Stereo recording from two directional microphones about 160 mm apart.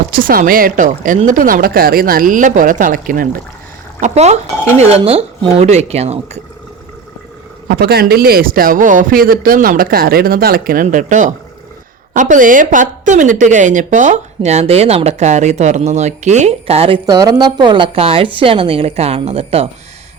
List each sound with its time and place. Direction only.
0.1 s speech: 60° right (ahead or behind)
4.0 s a woman's voice: 45° right (ahead or behind)
7.7 s a woman's voice: 80° right; by 17.0 s 35° right (ahead or behind)
17.1 s a woman's voice: 25° right (ahead or behind)